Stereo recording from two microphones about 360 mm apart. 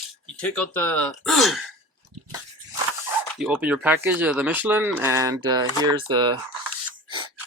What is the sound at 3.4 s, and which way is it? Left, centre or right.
Speech, centre.